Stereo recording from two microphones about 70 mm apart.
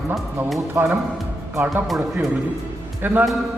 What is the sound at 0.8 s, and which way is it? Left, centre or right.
Speech, right.